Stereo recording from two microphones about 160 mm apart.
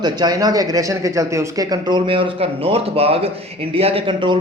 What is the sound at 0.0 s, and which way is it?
A man's voice, 25° right (ahead or behind).